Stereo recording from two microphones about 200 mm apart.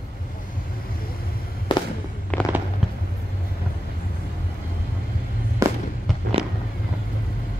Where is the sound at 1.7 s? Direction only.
25° left (ahead or behind).